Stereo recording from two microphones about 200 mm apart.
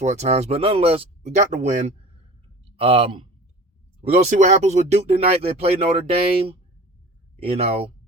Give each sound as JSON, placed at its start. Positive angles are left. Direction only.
{"t": 0.0, "sound": "speech", "side_deg": -35}